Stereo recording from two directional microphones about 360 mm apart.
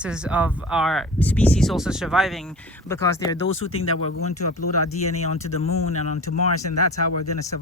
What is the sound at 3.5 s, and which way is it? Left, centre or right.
Speech, left.